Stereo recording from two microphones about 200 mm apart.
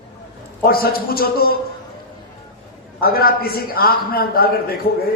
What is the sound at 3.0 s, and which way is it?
A man's voice, 50° left (ahead or behind).